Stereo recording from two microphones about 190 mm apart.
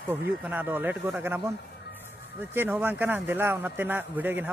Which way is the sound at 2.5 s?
10° right (ahead or behind).